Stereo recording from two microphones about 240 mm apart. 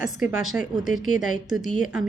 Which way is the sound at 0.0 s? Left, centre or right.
Centre.